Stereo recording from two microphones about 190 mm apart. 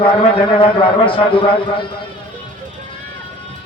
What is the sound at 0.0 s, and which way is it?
A man's voice, 25° left (ahead or behind).